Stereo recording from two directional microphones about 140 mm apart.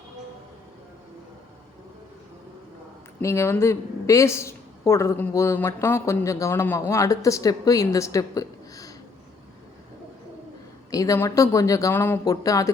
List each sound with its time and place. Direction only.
3.2 s speech: 20° left (ahead or behind)
10.9 s speech: 25° left (ahead or behind)